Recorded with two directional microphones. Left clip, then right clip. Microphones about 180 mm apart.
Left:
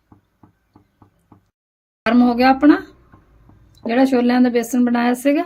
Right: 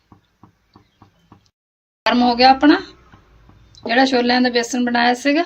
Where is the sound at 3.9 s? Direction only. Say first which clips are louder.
Right 1 dB; 60° left (ahead or behind).